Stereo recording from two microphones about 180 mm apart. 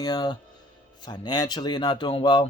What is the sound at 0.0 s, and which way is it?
Speech, 20° left (ahead or behind).